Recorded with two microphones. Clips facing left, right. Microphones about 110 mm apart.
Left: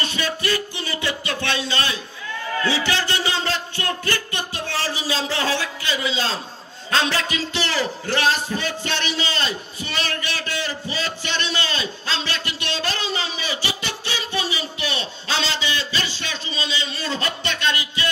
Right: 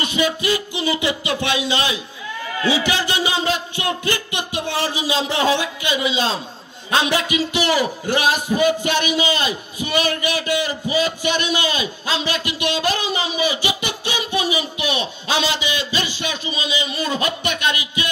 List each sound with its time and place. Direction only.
0.0 s a man's voice: 15° right (ahead or behind)